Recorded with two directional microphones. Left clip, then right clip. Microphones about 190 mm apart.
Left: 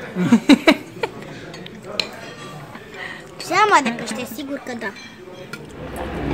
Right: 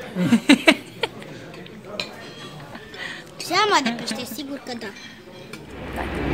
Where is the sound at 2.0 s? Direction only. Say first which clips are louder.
Left 6 dB; 55° left (ahead or behind).